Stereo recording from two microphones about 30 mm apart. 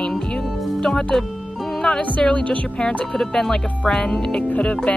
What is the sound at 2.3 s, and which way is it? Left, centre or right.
Speech, left.